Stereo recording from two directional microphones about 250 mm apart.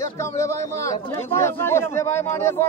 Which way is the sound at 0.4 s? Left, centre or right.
Centre.